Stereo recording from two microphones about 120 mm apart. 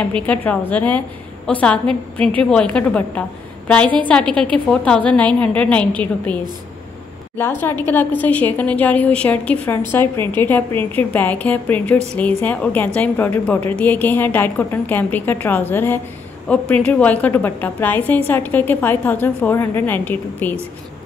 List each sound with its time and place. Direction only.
0.0 s a woman's voice: 10° left (ahead or behind)
7.3 s a woman's voice: 20° left (ahead or behind)